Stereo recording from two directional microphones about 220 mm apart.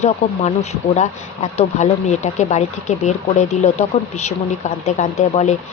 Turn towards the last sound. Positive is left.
turn(degrees=30)  # may be behind; listen again after turning